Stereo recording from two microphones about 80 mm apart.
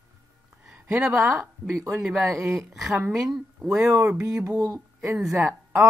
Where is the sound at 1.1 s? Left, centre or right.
Right.